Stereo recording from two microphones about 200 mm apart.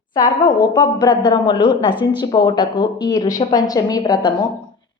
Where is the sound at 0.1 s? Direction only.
20° left (ahead or behind).